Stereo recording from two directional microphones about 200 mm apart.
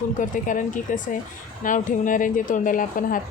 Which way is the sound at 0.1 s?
40° left (ahead or behind).